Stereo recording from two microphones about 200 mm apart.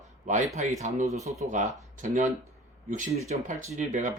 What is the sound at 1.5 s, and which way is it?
Speech, 40° right (ahead or behind).